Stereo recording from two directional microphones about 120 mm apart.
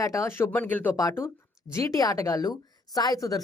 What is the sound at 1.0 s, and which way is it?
Speech, 30° left (ahead or behind).